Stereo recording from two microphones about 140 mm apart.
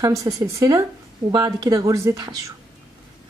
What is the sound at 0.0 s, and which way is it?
Speech, 25° right (ahead or behind).